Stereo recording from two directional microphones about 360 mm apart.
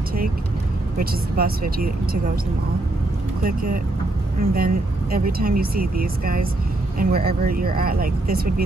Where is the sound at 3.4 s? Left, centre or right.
Right.